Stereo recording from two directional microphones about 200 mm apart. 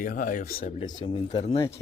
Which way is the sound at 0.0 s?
40° left (ahead or behind).